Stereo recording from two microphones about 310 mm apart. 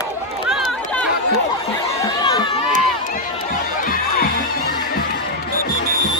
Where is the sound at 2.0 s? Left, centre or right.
Centre.